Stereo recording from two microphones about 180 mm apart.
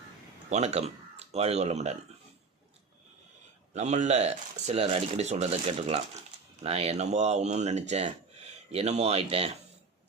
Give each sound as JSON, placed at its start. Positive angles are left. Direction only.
{"t": 0.5, "sound": "speech", "side_deg": -35}
{"t": 3.8, "sound": "speech", "side_deg": -40}